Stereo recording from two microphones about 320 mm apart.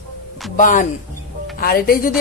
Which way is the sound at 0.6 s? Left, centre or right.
Left.